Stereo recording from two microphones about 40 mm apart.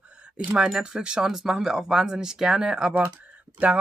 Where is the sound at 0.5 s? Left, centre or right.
Centre.